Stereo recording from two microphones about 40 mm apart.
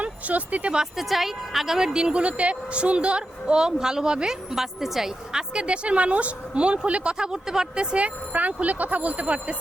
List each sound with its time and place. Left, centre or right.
0.0 s speech: right
0.9 s a woman's voice: centre
1.9 s a woman's voice: right
4.5 s a woman's voice: centre
5.6 s speech: right
8.0 s speech: right